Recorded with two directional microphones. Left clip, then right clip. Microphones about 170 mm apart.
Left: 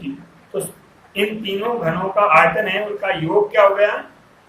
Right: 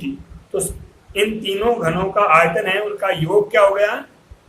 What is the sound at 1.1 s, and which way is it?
A man's voice, 40° right (ahead or behind).